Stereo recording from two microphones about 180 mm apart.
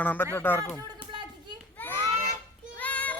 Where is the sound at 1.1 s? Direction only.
25° right (ahead or behind).